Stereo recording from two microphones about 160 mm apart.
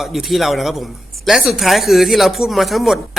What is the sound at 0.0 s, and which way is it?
Speech, centre (ahead or behind).